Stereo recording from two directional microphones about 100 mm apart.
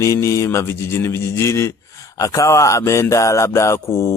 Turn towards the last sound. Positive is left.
turn(degrees=30)  # may be behind; listen again after turning